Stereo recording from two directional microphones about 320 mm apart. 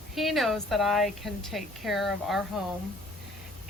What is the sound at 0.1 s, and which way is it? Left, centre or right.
Speech, centre.